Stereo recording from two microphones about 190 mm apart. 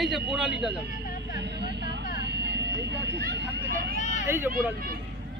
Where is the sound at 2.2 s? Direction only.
65° right (ahead or behind).